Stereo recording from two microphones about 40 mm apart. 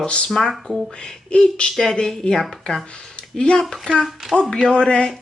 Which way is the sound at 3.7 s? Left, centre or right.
Centre.